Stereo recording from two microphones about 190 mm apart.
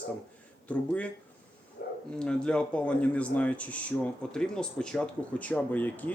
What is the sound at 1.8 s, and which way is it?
Bow-wow, 60° left (ahead or behind).